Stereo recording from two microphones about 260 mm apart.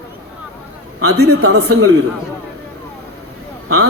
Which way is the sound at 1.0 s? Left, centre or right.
Right.